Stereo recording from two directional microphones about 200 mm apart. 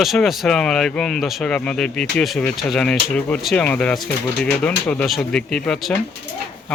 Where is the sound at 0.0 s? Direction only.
Centre (ahead or behind).